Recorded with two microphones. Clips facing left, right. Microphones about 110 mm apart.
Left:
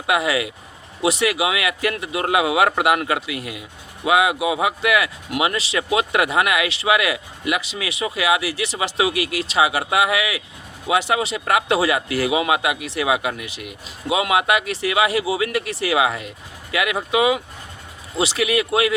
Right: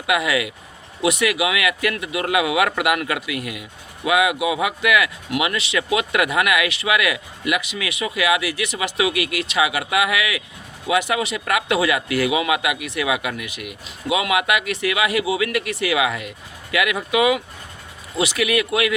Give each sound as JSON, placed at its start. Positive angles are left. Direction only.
{"t": 0.1, "sound": "speech", "side_deg": 30}